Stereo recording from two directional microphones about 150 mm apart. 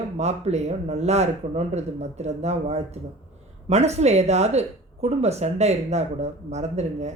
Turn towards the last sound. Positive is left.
turn(degrees=-50)  # may be behind; listen again after turning